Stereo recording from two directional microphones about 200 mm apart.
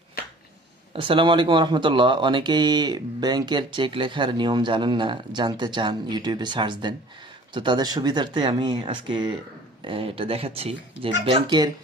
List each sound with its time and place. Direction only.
0.9 s speech: 25° right (ahead or behind)